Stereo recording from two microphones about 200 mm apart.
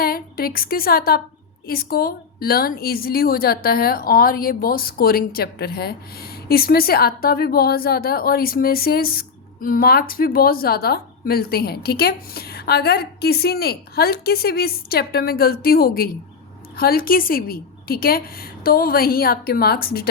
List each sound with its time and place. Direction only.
0.0 s a woman's voice: 50° left (ahead or behind)